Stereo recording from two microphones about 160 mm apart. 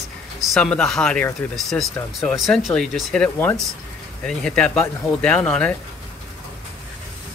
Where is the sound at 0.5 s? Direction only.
5° left (ahead or behind).